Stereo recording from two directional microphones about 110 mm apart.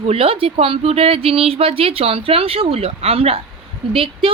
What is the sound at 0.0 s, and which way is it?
A woman's voice, 65° right (ahead or behind).